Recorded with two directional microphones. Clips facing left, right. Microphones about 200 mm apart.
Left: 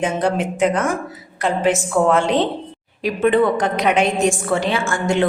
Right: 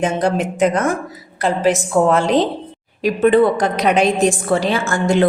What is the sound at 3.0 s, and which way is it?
A woman's voice, 35° right (ahead or behind).